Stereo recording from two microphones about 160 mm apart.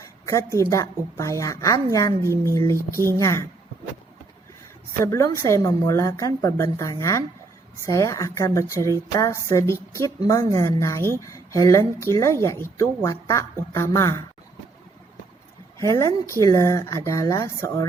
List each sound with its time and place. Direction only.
0.0 s a sound: 20° left (ahead or behind)
0.7 s a woman's voice: 20° left (ahead or behind)
5.0 s a woman's voice: 20° left (ahead or behind)
15.8 s a woman's voice: 20° left (ahead or behind)